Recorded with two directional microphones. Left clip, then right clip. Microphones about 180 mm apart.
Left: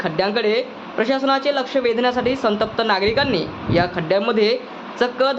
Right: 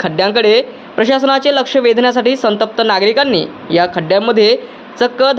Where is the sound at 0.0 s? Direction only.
40° right (ahead or behind).